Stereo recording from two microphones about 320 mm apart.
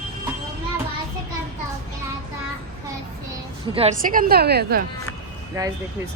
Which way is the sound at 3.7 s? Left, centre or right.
Centre.